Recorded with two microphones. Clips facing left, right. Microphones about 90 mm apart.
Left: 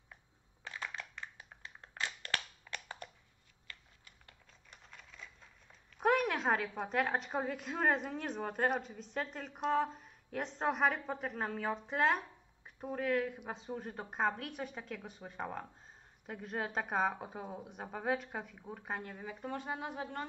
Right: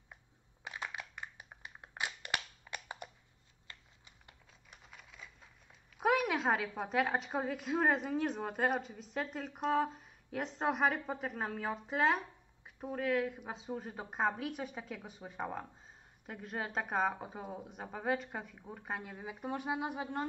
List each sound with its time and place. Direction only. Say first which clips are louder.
0.7 s a sound: right 1 dB; 15° right (ahead or behind)
3.6 s computer keyboard: left 1 dB; 20° right (ahead or behind)
4.6 s a woman's voice: even; 5° right (ahead or behind)